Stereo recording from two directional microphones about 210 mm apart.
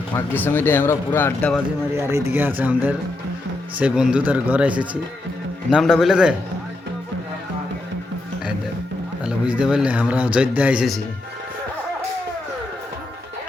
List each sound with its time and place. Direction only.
0.1 s speech: 10° left (ahead or behind)
2.0 s a man's voice: 10° right (ahead or behind)
9.2 s speech: 5° right (ahead or behind)